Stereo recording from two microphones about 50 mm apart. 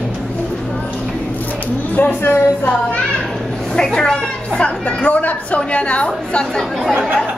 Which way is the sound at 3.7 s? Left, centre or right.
Centre.